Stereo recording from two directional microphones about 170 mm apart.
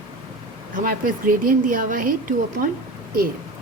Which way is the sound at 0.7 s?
55° right (ahead or behind).